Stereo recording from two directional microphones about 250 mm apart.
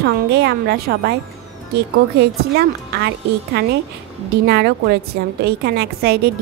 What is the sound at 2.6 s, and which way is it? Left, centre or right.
A woman's voice, right.